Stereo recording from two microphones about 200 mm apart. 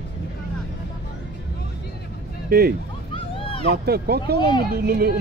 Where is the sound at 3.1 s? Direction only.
25° left (ahead or behind).